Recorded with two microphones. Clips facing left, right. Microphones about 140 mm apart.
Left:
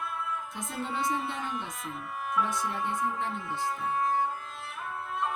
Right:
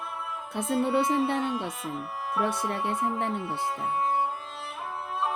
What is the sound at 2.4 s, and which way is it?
Music, 60° right (ahead or behind).